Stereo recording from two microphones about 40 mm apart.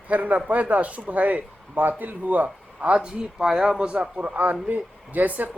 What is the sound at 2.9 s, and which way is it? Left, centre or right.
Speech, right.